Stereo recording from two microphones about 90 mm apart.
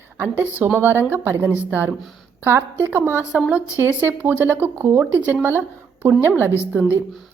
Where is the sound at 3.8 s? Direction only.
20° right (ahead or behind).